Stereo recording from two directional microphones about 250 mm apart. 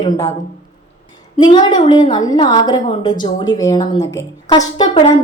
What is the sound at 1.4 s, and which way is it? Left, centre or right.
A woman's voice, centre.